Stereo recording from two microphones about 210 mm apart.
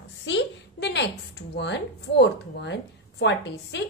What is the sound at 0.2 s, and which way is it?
A woman's voice, 55° left (ahead or behind).